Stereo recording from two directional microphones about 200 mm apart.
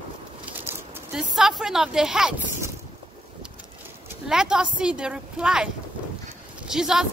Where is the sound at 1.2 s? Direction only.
Centre (ahead or behind).